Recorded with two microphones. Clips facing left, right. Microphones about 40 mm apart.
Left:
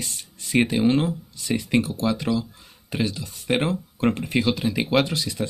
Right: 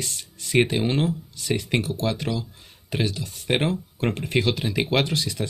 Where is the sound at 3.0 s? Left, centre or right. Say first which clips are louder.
Even; centre.